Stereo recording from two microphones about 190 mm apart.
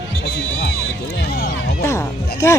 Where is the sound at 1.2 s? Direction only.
55° left (ahead or behind).